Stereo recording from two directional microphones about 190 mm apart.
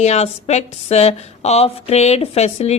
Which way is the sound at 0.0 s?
35° left (ahead or behind).